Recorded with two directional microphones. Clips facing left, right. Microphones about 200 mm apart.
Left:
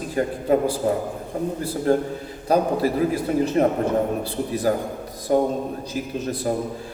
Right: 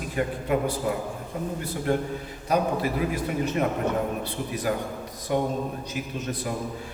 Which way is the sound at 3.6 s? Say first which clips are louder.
Left 5 dB; 35° left (ahead or behind).